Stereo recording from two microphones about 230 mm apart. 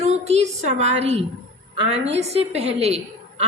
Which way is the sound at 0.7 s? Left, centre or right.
Right.